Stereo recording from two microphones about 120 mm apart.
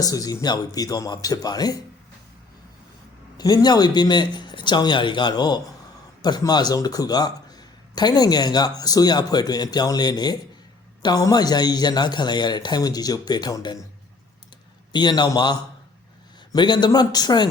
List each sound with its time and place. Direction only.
0.0 s a man's voice: 30° left (ahead or behind)
3.3 s a man's voice: 35° left (ahead or behind)
14.9 s a man's voice: 35° left (ahead or behind)